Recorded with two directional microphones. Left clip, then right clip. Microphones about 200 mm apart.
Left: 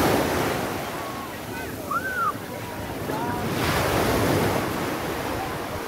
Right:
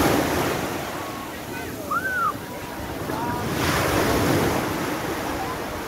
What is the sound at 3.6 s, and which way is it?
Waves, 45° right (ahead or behind).